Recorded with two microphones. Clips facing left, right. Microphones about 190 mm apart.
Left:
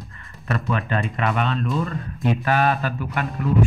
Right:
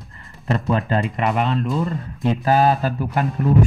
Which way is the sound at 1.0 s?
20° right (ahead or behind).